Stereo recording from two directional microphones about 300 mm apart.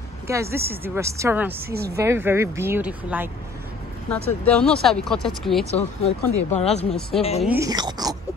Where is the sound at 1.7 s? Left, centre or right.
Right.